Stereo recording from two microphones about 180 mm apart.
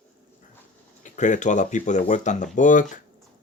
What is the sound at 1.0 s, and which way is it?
Speech, 45° left (ahead or behind).